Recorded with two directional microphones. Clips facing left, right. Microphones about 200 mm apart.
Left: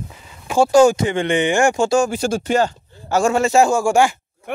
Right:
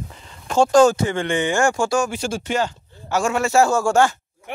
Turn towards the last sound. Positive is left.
turn(degrees=10)  # may be behind; listen again after turning